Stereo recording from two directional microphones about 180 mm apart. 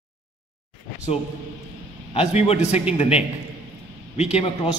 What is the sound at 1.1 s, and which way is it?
A man's voice, 35° left (ahead or behind).